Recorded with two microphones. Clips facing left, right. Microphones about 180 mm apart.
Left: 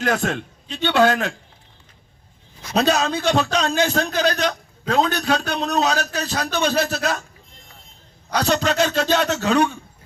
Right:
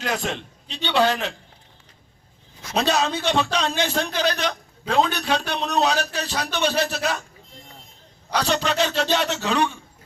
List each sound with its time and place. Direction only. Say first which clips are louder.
0.0 s a man's voice: left 5 dB; 50° left (ahead or behind)
2.7 s a man's voice: left 3 dB; 40° left (ahead or behind)
8.3 s a man's voice: left 3 dB; 45° left (ahead or behind)